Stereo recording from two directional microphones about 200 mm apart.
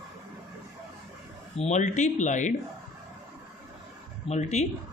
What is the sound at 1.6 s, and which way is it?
Speech, 35° left (ahead or behind).